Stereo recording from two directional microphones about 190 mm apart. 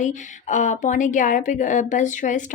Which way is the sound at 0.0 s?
40° left (ahead or behind).